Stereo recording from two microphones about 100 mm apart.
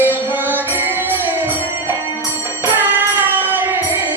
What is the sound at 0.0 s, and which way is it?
Music, 20° right (ahead or behind).